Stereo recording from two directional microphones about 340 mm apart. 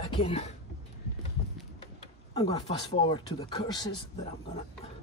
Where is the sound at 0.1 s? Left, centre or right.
Centre.